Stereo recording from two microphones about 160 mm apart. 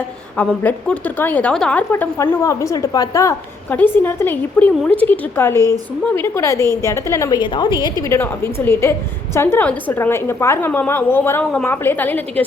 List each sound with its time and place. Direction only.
0.3 s a woman's voice: 10° left (ahead or behind)
5.5 s a woman's voice: 20° right (ahead or behind)
6.1 s a woman's voice: 15° left (ahead or behind)